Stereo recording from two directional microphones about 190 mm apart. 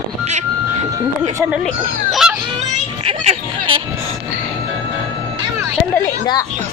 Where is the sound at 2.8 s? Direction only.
35° right (ahead or behind).